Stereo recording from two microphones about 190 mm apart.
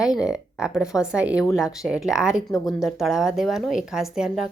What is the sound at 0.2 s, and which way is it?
Speech, 5° right (ahead or behind).